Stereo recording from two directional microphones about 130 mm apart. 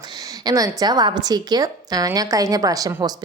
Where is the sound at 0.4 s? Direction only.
30° right (ahead or behind).